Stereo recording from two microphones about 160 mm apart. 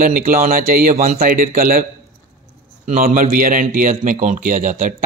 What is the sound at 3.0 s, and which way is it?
A man's voice, 60° right (ahead or behind).